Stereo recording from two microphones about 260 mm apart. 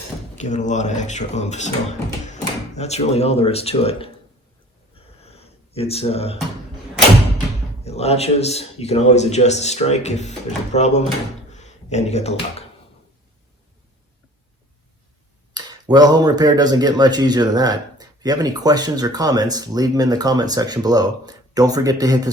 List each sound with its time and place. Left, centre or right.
0.3 s a man's voice: left
4.9 s a sound: left
7.9 s a man's voice: left
15.5 s speech: centre